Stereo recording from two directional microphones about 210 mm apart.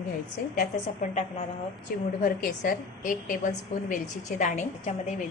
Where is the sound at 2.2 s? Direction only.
40° left (ahead or behind).